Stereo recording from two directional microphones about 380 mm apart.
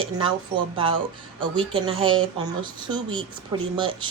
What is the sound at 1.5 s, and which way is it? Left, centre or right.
Speech, centre.